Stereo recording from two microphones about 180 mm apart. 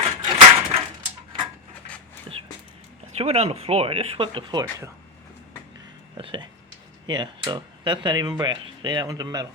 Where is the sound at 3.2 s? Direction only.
35° right (ahead or behind).